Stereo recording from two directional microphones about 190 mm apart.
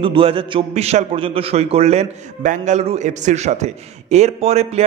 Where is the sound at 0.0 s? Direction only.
30° right (ahead or behind).